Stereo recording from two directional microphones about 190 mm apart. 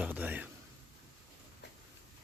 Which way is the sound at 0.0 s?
10° right (ahead or behind).